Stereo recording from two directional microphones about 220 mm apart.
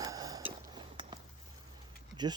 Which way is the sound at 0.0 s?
15° right (ahead or behind).